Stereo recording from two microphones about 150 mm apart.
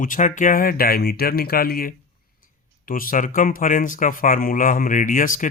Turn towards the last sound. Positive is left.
turn(degrees=60)  # may be behind; listen again after turning